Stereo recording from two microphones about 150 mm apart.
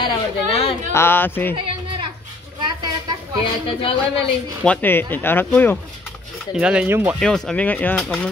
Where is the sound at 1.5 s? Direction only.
35° right (ahead or behind).